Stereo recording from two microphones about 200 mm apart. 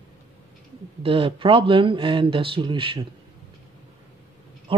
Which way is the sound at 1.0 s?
25° right (ahead or behind).